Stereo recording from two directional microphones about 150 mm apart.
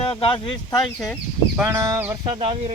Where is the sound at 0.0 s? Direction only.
35° left (ahead or behind).